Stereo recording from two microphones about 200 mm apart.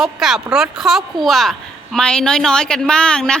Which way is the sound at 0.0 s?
Centre (ahead or behind).